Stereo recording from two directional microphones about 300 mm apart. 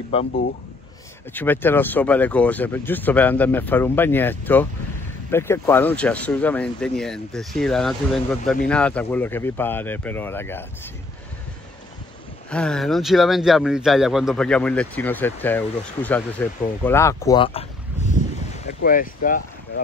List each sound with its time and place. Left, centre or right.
0.1 s speech: left
1.3 s speech: centre
12.4 s speech: centre; by 19.4 s left